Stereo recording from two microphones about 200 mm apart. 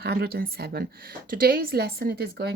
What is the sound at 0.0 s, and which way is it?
Speech, 50° right (ahead or behind).